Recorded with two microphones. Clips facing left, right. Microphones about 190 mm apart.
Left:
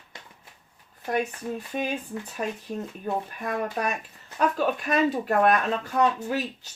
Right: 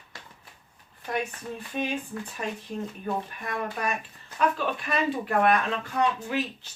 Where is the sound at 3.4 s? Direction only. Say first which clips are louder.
Left 5 dB; 45° left (ahead or behind).